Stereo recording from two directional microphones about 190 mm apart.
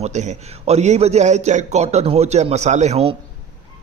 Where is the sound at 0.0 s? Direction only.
40° right (ahead or behind).